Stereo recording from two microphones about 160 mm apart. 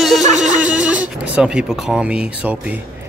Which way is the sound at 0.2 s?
50° right (ahead or behind).